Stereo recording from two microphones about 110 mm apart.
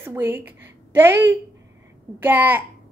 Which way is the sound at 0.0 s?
20° right (ahead or behind).